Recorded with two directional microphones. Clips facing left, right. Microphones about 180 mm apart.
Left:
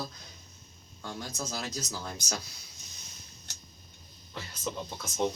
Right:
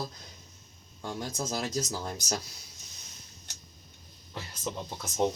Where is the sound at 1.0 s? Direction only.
20° right (ahead or behind).